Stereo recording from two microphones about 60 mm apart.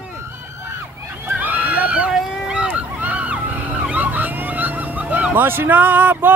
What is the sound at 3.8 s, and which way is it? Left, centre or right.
Emergency vehicle, right.